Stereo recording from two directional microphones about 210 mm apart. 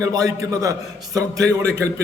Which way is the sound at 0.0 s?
15° right (ahead or behind).